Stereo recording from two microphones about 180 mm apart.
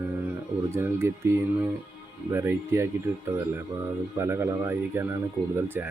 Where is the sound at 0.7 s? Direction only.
15° right (ahead or behind).